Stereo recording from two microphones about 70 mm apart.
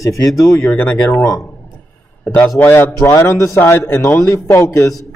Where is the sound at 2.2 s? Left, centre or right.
Centre.